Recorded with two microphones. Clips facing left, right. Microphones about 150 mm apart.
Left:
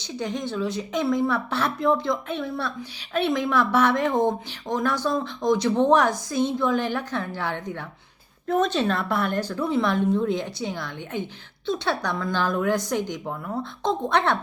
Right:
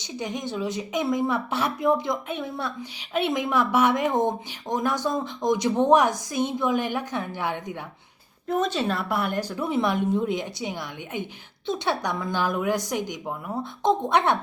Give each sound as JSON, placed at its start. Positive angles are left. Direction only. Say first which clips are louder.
{"t": 0.0, "sound": "a woman's voice", "louder": "left 2 dB", "side_deg": -15}